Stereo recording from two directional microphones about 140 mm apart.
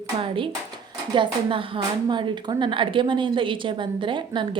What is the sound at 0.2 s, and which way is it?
Speech, 40° right (ahead or behind).